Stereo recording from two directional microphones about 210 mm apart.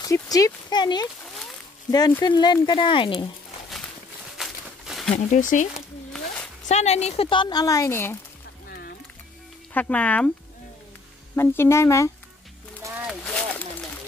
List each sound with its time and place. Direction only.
0.0 s a woman's voice: 15° left (ahead or behind)
4.4 s a sound: centre (ahead or behind)
5.1 s speech: 35° left (ahead or behind)
5.7 s a sound: centre (ahead or behind)
6.7 s a woman's voice: 30° left (ahead or behind); by 8.2 s 10° left (ahead or behind)
8.6 s music: 45° left (ahead or behind)
9.8 s speech: 5° left (ahead or behind)
11.3 s speech: 10° left (ahead or behind)
13.0 s a sound: centre (ahead or behind)